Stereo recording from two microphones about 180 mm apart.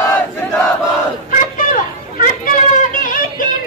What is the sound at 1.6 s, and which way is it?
Children playing, 50° left (ahead or behind).